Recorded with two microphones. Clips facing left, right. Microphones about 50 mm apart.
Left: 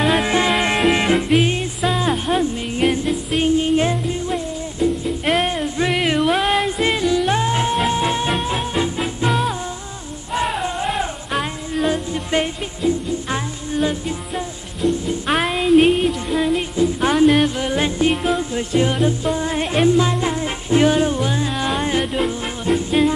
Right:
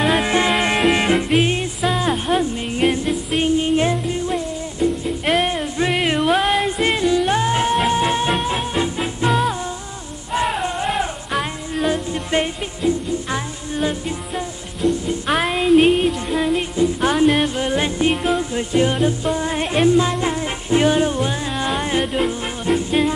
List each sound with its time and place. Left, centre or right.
0.0 s music: centre
7.3 s music: right
8.3 s music: centre